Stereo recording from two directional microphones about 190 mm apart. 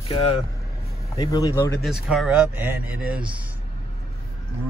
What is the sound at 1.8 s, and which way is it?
A man's voice, centre (ahead or behind).